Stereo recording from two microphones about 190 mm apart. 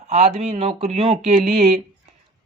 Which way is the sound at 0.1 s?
35° right (ahead or behind).